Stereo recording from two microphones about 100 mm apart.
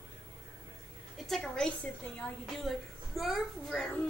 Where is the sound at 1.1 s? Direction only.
Centre (ahead or behind).